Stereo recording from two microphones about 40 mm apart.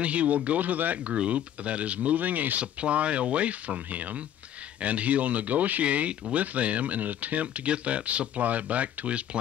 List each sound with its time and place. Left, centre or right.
0.0 s speech: right